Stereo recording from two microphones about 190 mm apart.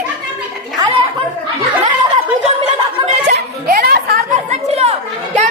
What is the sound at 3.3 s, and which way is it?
Music, 55° right (ahead or behind).